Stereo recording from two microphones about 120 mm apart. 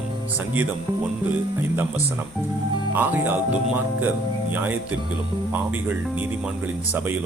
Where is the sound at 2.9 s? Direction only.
15° right (ahead or behind).